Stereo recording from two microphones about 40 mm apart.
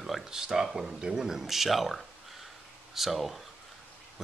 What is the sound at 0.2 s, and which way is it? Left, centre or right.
A man's voice, centre.